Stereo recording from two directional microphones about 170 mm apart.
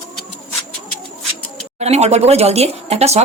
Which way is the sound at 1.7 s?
40° right (ahead or behind).